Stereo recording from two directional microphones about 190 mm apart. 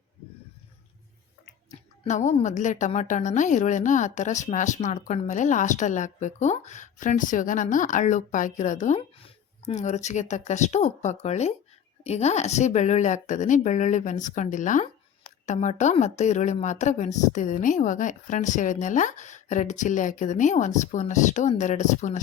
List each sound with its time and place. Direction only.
2.0 s a woman's voice: 40° left (ahead or behind)